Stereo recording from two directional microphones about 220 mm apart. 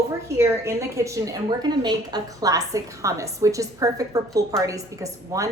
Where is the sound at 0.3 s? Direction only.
15° right (ahead or behind).